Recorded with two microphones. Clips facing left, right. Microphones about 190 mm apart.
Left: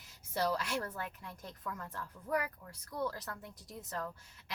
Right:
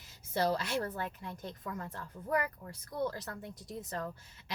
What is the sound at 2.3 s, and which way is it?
Speech, 45° right (ahead or behind).